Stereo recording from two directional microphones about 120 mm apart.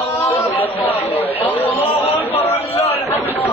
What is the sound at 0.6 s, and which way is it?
Chatter, 15° left (ahead or behind).